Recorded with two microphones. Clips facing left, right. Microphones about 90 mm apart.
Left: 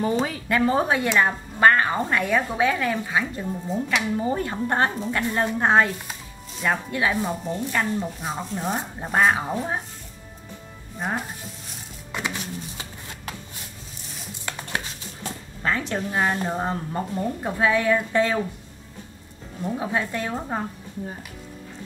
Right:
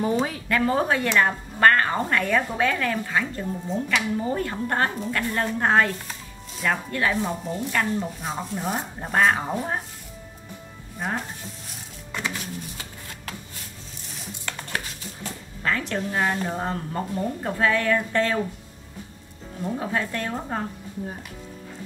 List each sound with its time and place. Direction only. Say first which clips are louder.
0.0 s speech: even; 5° right (ahead or behind)
0.5 s a woman's voice: left 2 dB; 20° left (ahead or behind)
11.0 s sizzle: left 1 dB; 5° left (ahead or behind)
12.1 s music: left 1 dB; 20° left (ahead or behind)
14.4 s dishes: left 1 dB; 15° left (ahead or behind)
15.6 s a woman's voice: left 1 dB; 20° left (ahead or behind)
19.8 s a woman's voice: left 2 dB; 10° left (ahead or behind)